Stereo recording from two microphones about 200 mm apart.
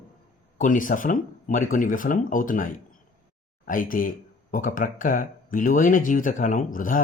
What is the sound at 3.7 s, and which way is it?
Speech, 45° left (ahead or behind).